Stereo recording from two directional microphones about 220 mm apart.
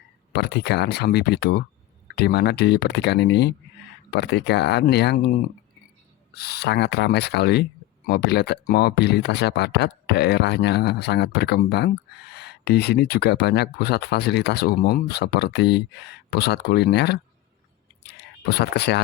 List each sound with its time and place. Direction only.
0.3 s speech: 50° left (ahead or behind)